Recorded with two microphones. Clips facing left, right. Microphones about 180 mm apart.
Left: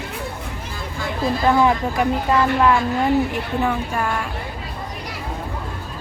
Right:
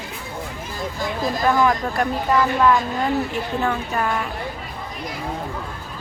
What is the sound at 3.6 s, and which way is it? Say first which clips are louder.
Speech: even; centre (ahead or behind).